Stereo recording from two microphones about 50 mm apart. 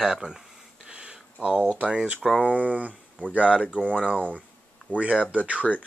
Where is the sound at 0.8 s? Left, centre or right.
Centre.